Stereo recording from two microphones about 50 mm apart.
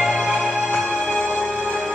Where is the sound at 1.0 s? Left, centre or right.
Centre.